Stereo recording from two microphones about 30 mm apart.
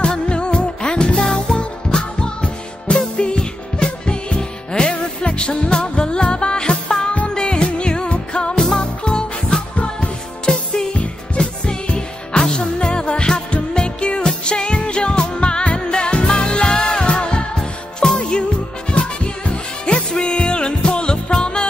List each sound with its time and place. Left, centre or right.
0.0 s music: left
8.5 s music: left
18.9 s music: left